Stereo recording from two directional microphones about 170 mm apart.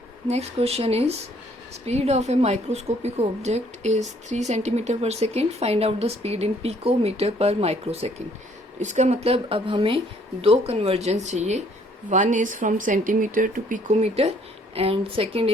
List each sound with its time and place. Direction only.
0.3 s a woman's voice: 40° right (ahead or behind)